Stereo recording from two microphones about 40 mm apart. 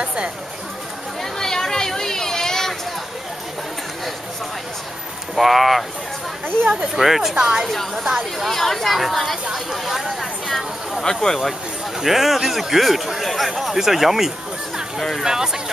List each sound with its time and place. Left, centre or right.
0.0 s speech: right
1.2 s a sound: centre
5.3 s speech: centre
7.0 s speech: centre
7.3 s a woman's voice: centre
7.6 s speech: centre
7.9 s speech: centre
8.4 s speech: centre
10.5 s speech: centre
12.0 s speech: centre
15.2 s speech: centre